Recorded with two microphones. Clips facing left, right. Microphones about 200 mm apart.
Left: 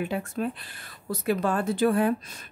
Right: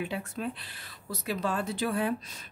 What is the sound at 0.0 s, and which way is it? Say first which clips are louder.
Speech: left 5 dB; 50° left (ahead or behind).